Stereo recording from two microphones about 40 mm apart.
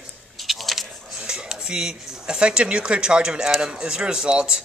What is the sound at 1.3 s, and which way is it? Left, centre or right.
Speech, centre.